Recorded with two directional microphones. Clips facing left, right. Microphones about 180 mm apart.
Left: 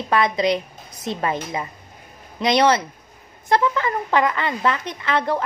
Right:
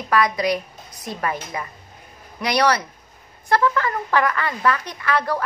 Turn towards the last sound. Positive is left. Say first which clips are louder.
# left 1 dB
turn(degrees=20)  # may be behind; listen again after turning